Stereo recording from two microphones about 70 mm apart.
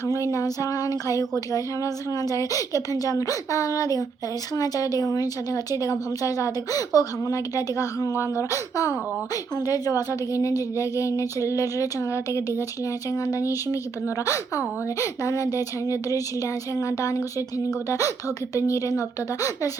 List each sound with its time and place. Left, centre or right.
0.0 s a woman's voice: left